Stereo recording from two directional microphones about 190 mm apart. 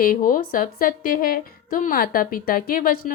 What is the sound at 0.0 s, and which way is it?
A woman's voice, 50° left (ahead or behind).